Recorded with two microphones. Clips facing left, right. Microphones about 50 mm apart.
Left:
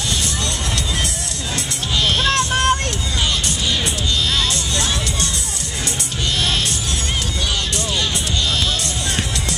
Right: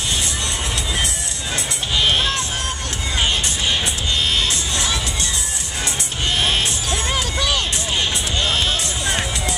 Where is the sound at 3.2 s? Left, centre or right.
Right.